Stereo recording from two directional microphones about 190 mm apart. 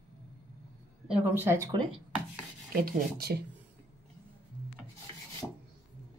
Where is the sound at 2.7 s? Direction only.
50° right (ahead or behind).